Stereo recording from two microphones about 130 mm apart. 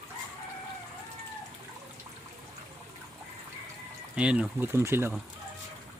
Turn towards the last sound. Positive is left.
turn(degrees=-20)  # may be behind; listen again after turning